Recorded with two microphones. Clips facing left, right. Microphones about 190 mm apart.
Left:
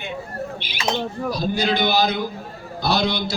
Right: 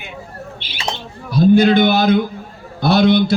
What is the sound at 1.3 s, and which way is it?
A man's voice, 55° right (ahead or behind).